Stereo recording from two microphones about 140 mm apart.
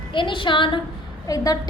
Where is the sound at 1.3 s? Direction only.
25° left (ahead or behind).